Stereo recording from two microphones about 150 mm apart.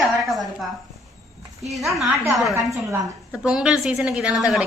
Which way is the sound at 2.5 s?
20° right (ahead or behind).